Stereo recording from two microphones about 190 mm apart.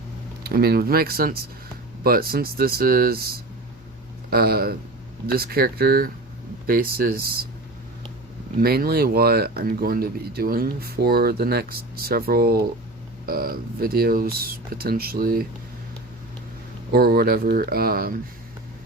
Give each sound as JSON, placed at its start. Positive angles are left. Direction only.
{"t": 0.4, "sound": "speech", "side_deg": -55}
{"t": 8.6, "sound": "speech", "side_deg": -55}
{"t": 16.9, "sound": "speech", "side_deg": -55}